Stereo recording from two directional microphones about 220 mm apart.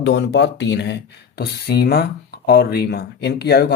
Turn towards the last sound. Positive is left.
turn(degrees=50)  # may be behind; listen again after turning